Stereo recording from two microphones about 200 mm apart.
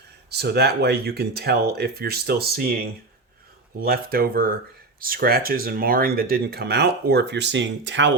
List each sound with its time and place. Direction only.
0.3 s speech: 55° right (ahead or behind)